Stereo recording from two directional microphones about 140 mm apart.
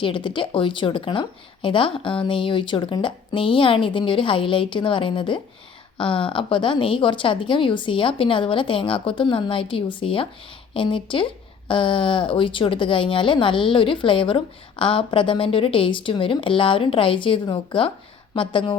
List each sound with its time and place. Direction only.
0.0 s speech: 35° left (ahead or behind)